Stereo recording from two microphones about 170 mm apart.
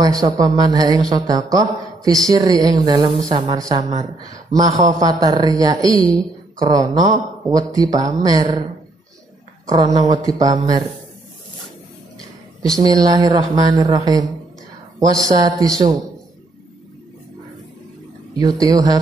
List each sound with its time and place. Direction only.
0.0 s speech: 20° right (ahead or behind)
9.7 s speech: 20° right (ahead or behind)
12.7 s speech: 20° right (ahead or behind)
18.4 s speech: 20° right (ahead or behind)